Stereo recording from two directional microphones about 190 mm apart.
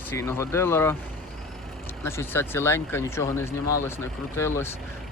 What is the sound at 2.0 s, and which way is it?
Speech, 15° left (ahead or behind).